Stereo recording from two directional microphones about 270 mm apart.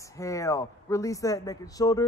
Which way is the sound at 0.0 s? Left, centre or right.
Centre.